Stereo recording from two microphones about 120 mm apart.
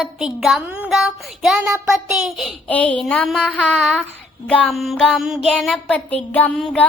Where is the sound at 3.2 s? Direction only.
Centre (ahead or behind).